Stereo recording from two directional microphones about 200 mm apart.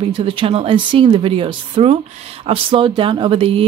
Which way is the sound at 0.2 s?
25° right (ahead or behind).